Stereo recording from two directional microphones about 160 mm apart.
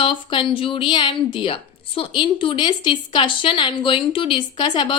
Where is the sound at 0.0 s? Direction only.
30° left (ahead or behind).